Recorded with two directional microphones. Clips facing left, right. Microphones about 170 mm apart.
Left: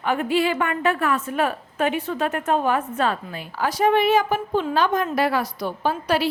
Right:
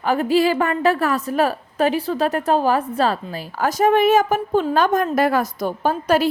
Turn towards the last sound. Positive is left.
turn(degrees=-45)  # may be behind; listen again after turning